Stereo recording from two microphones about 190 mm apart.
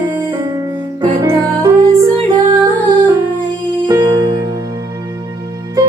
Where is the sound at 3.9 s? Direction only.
25° right (ahead or behind).